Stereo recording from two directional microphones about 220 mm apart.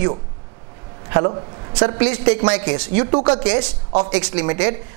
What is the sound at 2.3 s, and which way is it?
A woman's voice, 15° right (ahead or behind).